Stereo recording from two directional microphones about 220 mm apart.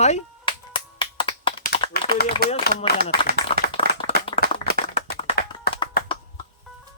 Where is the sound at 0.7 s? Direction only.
25° left (ahead or behind).